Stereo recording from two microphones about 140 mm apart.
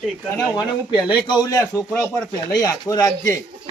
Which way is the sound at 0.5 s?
35° left (ahead or behind).